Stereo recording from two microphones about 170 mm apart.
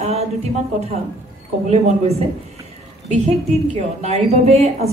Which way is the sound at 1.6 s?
40° right (ahead or behind).